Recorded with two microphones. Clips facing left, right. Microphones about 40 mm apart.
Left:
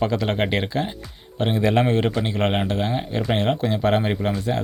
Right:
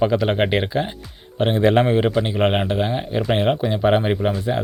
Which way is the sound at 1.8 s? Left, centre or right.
Centre.